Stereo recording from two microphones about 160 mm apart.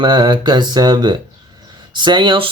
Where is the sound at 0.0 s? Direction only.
30° right (ahead or behind).